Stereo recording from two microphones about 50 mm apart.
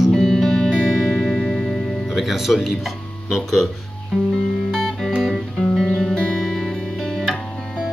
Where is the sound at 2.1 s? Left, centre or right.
Centre.